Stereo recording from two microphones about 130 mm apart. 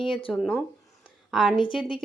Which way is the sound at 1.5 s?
40° left (ahead or behind).